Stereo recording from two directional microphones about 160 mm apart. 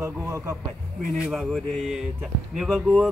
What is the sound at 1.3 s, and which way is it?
Mantra, centre (ahead or behind).